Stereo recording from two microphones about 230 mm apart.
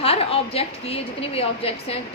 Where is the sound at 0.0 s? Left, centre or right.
Left.